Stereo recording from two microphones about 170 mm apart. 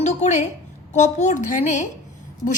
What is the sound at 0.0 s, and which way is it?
A woman's voice, 45° left (ahead or behind).